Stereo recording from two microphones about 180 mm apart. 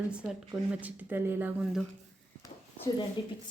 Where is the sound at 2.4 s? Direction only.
20° left (ahead or behind).